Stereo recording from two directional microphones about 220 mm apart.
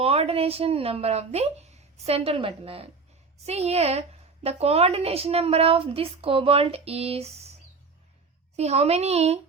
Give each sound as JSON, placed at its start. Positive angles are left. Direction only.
{"t": 0.0, "sound": "a woman's voice", "side_deg": -25}
{"t": 8.5, "sound": "a woman's voice", "side_deg": -30}